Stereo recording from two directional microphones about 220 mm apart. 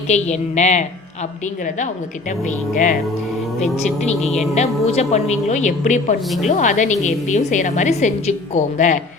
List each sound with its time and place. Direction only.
0.1 s a woman's voice: 30° left (ahead or behind)
2.7 s a woman's voice: 35° left (ahead or behind)